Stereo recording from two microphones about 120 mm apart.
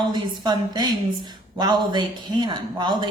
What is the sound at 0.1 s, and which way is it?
A woman's voice, 35° right (ahead or behind).